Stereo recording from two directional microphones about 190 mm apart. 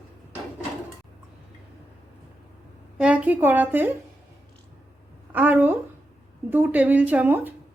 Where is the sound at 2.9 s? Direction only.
5° right (ahead or behind).